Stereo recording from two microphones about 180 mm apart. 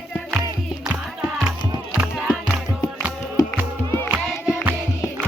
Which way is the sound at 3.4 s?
20° left (ahead or behind).